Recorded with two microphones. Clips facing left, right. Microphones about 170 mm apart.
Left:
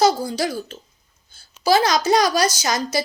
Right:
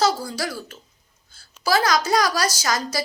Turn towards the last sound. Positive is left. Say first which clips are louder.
# left 3 dB
turn(degrees=20)  # may be behind; listen again after turning